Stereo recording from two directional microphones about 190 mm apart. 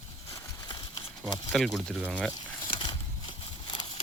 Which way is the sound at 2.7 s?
25° left (ahead or behind).